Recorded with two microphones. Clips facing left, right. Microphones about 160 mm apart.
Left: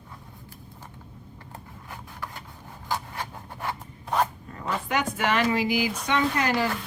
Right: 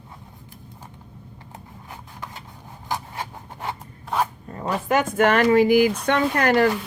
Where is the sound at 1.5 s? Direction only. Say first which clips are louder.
Right 1 dB; 20° right (ahead or behind).